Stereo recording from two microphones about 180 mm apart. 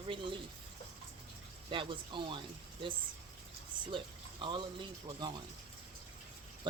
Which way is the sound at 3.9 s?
25° right (ahead or behind).